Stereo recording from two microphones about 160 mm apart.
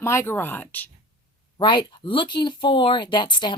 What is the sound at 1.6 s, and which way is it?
Speech, 30° left (ahead or behind).